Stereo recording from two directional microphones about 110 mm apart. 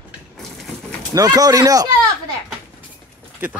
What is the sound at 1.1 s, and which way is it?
Speech, 35° right (ahead or behind).